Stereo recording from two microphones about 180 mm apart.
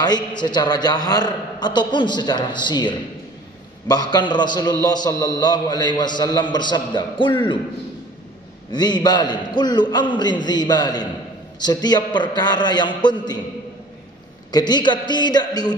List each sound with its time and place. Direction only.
0.4 s a man's voice: 25° left (ahead or behind)
8.7 s a man's voice: 25° left (ahead or behind)
14.5 s a man's voice: 25° left (ahead or behind)